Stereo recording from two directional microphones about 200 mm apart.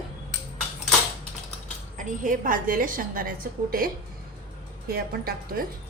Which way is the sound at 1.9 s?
40° right (ahead or behind).